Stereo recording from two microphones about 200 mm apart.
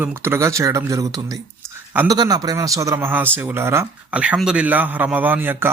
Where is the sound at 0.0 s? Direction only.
10° right (ahead or behind).